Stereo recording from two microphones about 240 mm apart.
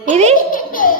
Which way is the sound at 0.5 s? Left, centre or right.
Left.